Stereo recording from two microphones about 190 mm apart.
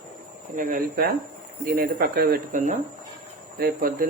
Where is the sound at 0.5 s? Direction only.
45° right (ahead or behind).